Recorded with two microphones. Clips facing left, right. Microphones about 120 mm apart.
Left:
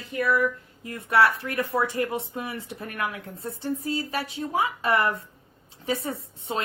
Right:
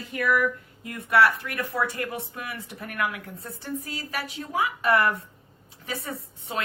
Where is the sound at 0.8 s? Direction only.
25° left (ahead or behind).